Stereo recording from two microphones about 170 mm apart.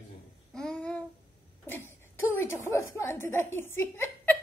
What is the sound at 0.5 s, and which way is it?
Child singing, 5° left (ahead or behind).